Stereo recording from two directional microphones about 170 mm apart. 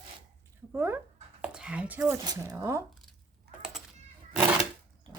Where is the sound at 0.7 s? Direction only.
15° right (ahead or behind).